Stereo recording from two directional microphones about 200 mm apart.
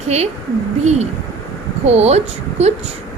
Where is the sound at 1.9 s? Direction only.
30° right (ahead or behind).